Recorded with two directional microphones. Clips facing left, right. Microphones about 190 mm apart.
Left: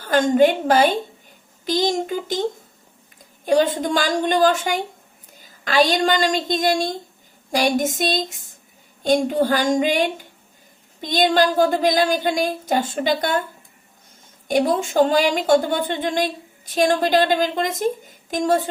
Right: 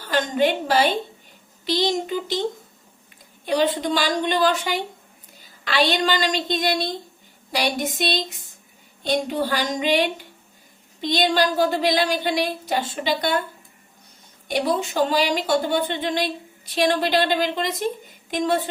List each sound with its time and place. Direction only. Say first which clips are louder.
0.0 s a woman's voice: left 5 dB; 45° left (ahead or behind)
3.4 s a woman's voice: left 3 dB; 45° left (ahead or behind)
14.4 s a woman's voice: left 4 dB; 45° left (ahead or behind)